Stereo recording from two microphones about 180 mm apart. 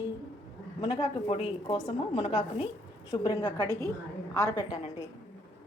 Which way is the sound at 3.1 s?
20° left (ahead or behind).